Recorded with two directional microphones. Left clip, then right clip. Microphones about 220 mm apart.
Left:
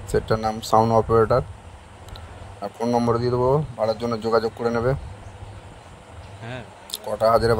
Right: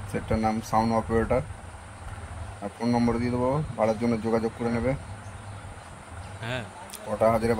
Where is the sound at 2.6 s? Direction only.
45° left (ahead or behind).